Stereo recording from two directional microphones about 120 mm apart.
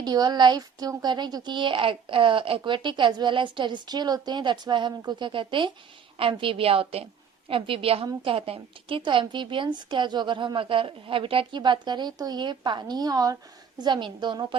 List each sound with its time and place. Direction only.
0.0 s a woman's voice: 35° right (ahead or behind)